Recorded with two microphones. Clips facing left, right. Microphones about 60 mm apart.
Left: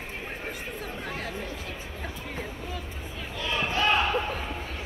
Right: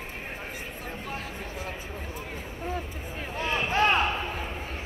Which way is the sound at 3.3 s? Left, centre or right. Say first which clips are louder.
Right 2 dB; right.